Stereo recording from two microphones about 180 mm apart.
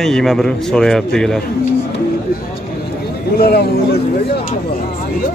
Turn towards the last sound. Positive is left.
turn(degrees=65)  # may be behind; listen again after turning